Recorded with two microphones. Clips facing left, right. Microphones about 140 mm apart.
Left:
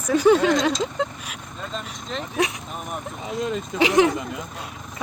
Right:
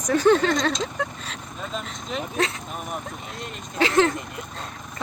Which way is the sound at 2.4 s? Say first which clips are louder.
Left 2 dB; 15° left (ahead or behind).